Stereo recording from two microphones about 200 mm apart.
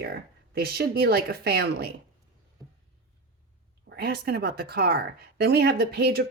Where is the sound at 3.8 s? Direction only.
50° right (ahead or behind).